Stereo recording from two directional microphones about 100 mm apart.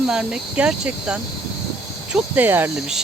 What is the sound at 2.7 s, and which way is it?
Speech, 5° right (ahead or behind).